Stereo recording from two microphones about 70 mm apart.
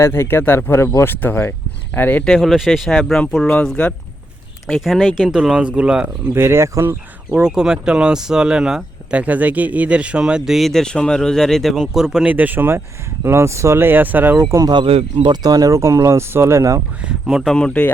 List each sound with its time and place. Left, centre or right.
0.0 s speech: left
2.2 s speech: centre
4.8 s speech: centre
6.3 s speech: right
7.4 s speech: centre
10.7 s speech: centre
12.3 s speech: right
13.2 s speech: right
14.7 s speech: right
15.7 s speech: right
17.0 s speech: centre
17.4 s speech: centre